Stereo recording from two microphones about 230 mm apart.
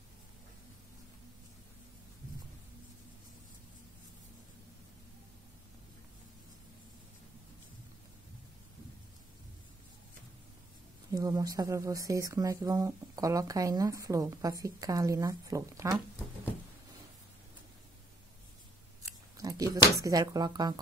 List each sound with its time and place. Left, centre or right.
11.1 s speech: centre
19.3 s speech: centre